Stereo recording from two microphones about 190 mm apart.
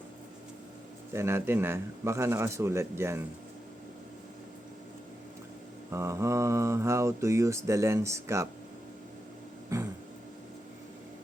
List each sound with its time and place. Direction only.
1.1 s mantra: 15° right (ahead or behind)
5.9 s mantra: 15° right (ahead or behind)
9.7 s a sound: 15° right (ahead or behind)